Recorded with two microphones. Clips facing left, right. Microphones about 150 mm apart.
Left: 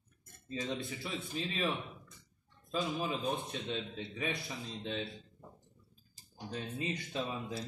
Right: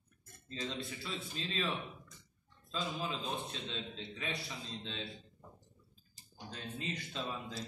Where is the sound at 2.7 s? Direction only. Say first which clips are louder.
Left 4 dB; 15° left (ahead or behind).